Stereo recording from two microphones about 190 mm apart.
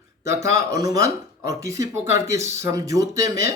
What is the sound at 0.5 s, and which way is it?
Speech, 15° right (ahead or behind).